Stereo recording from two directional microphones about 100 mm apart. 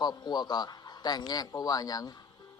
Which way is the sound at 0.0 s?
45° left (ahead or behind).